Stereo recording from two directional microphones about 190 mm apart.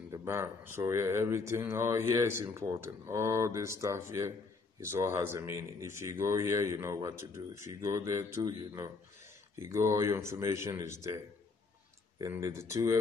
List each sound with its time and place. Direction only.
0.1 s speech: 15° right (ahead or behind)
12.2 s speech: 15° right (ahead or behind)